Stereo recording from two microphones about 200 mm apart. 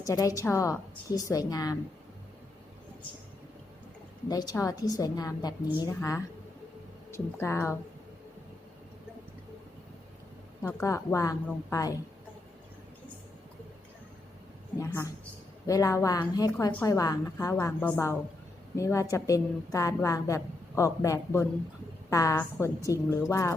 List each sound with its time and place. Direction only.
0.0 s a woman's voice: 15° left (ahead or behind)
4.3 s a woman's voice: 20° left (ahead or behind)
10.6 s a woman's voice: 15° left (ahead or behind)
14.8 s a woman's voice: 15° left (ahead or behind)